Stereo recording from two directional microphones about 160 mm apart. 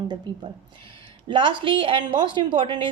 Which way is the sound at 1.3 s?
30° right (ahead or behind).